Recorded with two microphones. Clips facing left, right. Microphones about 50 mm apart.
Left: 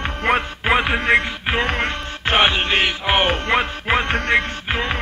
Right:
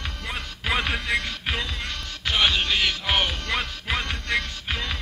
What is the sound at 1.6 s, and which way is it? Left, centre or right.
Music, left.